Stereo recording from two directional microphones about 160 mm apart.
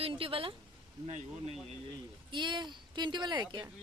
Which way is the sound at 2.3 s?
30° right (ahead or behind).